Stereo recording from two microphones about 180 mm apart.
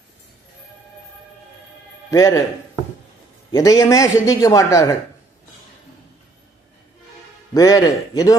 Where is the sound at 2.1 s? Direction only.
20° left (ahead or behind).